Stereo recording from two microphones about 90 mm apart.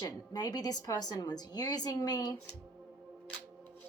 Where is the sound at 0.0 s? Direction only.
45° left (ahead or behind).